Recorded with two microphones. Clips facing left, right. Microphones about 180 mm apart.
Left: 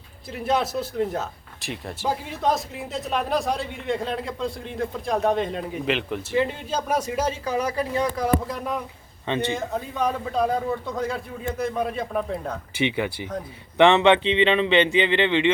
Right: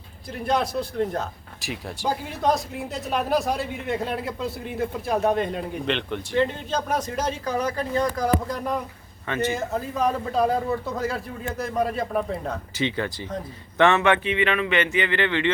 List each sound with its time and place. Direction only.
0.4 s speech: 5° left (ahead or behind)
13.7 s speech: 15° left (ahead or behind)